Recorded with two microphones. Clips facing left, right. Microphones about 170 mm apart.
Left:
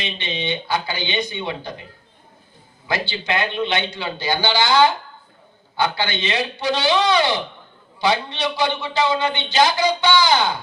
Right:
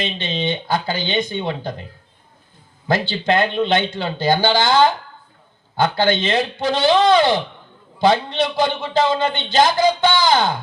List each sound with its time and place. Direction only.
0.0 s a man's voice: 50° right (ahead or behind)
2.8 s a man's voice: 50° right (ahead or behind)